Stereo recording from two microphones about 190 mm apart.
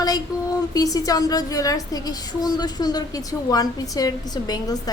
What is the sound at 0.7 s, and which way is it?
A woman's voice, 20° left (ahead or behind).